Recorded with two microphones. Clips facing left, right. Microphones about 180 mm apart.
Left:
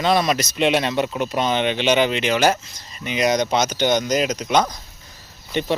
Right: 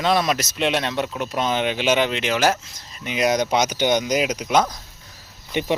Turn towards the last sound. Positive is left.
turn(degrees=-10)  # may be behind; listen again after turning